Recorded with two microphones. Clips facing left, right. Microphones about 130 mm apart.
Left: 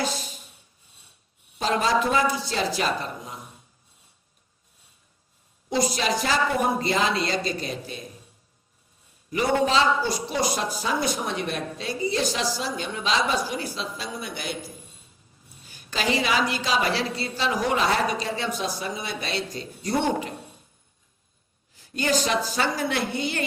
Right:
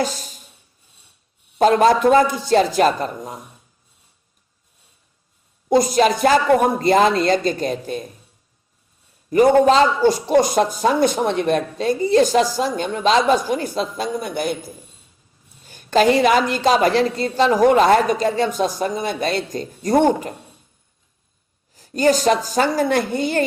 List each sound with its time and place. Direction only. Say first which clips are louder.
0.0 s a sound: right 5 dB; 40° right (ahead or behind)
1.5 s a man's voice: right 9 dB; 50° right (ahead or behind)
5.6 s a man's voice: right 10 dB; 50° right (ahead or behind)
9.3 s a man's voice: right 9 dB; 45° right (ahead or behind)
15.6 s a man's voice: right 12 dB; 50° right (ahead or behind)
21.8 s a man's voice: right 8 dB; 40° right (ahead or behind)